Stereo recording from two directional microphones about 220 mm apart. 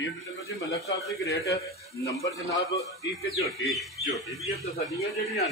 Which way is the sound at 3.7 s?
Centre (ahead or behind).